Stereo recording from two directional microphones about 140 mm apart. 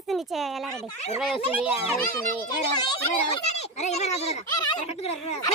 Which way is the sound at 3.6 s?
50° left (ahead or behind).